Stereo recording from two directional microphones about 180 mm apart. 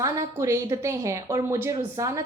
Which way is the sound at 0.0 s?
15° right (ahead or behind).